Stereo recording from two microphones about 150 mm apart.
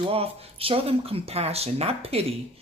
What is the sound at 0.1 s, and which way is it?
A woman's voice, 40° right (ahead or behind).